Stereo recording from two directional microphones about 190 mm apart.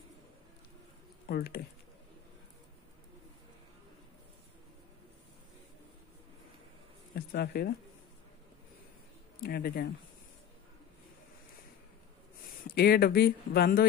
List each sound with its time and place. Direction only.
1.2 s speech: 55° left (ahead or behind)
7.2 s speech: 60° left (ahead or behind)
9.4 s speech: 55° left (ahead or behind)
12.6 s speech: 55° left (ahead or behind)